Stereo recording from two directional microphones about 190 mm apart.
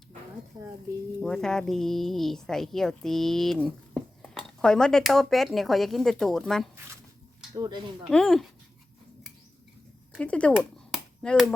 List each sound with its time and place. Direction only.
1.2 s a woman's voice: 5° left (ahead or behind)
7.5 s speech: 20° right (ahead or behind)
8.1 s a woman's voice: centre (ahead or behind)
10.2 s speech: 5° left (ahead or behind)
10.5 s finger snapping: centre (ahead or behind)